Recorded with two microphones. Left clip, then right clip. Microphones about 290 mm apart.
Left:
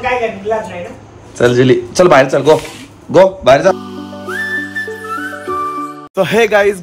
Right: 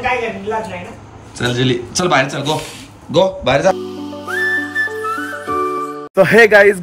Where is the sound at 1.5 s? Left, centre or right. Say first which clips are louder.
Left 6 dB; centre.